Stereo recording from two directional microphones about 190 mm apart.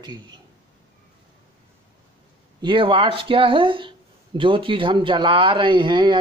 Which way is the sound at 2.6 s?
25° right (ahead or behind).